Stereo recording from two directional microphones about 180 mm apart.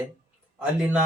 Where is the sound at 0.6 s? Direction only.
10° right (ahead or behind).